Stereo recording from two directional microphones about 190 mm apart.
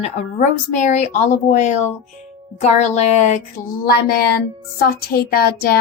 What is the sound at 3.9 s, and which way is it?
Speech, 55° left (ahead or behind).